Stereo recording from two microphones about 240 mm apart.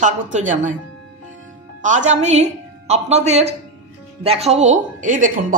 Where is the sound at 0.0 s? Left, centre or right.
Right.